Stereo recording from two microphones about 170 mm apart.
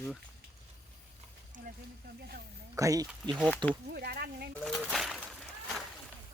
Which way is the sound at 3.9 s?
65° right (ahead or behind).